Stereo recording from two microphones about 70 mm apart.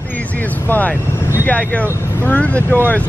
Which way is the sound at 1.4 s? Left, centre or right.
Left.